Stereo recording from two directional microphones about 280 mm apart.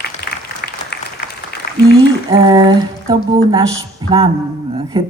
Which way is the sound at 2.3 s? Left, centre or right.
Centre.